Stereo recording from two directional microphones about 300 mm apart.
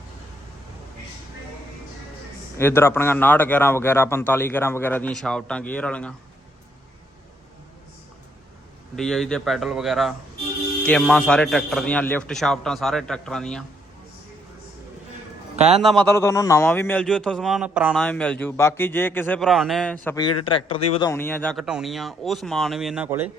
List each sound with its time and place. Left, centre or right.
2.6 s a man's voice: centre
9.0 s speech: centre
15.7 s speech: centre